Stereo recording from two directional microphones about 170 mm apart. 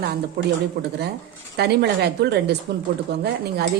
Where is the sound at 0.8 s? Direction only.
70° right (ahead or behind).